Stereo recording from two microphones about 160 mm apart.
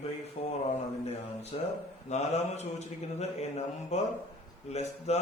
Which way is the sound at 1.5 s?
35° left (ahead or behind).